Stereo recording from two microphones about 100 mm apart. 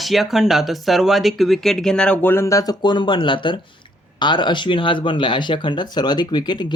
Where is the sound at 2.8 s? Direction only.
50° left (ahead or behind).